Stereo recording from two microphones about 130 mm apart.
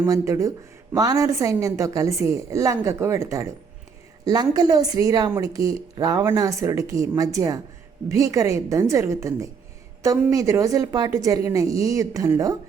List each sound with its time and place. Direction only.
0.0 s a woman's voice: 25° right (ahead or behind)